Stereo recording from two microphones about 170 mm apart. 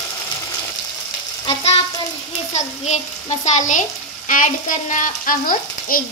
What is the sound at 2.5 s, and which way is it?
Frying, 45° left (ahead or behind).